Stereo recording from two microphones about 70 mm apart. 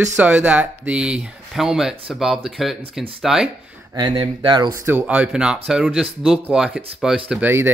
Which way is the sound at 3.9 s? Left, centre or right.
Right.